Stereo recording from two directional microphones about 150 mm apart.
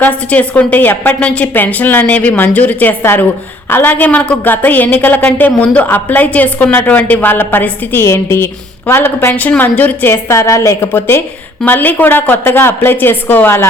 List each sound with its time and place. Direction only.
0.0 s a woman's voice: 10° left (ahead or behind)